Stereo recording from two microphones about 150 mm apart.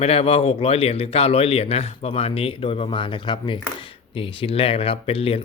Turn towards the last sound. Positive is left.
turn(degrees=40)  # may be behind; listen again after turning